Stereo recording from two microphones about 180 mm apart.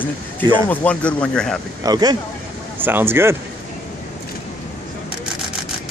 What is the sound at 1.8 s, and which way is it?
Speech, 20° right (ahead or behind).